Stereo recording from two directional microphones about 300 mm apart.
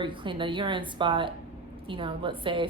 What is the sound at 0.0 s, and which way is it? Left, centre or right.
A woman's voice, centre.